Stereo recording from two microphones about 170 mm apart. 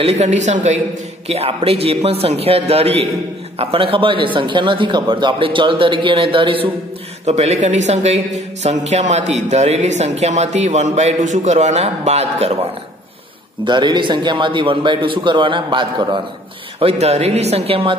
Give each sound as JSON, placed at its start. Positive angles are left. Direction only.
{"t": 0.0, "sound": "a man's voice", "side_deg": -40}
{"t": 13.7, "sound": "a man's voice", "side_deg": -25}
{"t": 16.8, "sound": "speech", "side_deg": -40}